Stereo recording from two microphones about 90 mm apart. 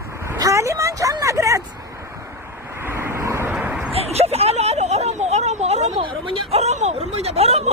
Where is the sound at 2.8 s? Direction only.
25° right (ahead or behind).